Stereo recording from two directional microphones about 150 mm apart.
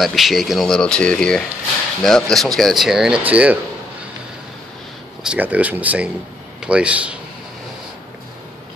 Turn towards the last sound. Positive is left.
turn(degrees=-10)  # may be behind; listen again after turning